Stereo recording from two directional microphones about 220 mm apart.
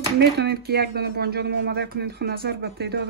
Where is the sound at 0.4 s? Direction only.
45° right (ahead or behind).